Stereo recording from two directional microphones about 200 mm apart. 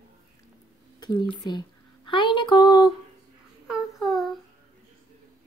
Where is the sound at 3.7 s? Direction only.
Centre (ahead or behind).